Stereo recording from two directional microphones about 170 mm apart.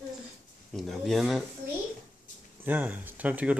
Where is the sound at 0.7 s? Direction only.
Centre (ahead or behind).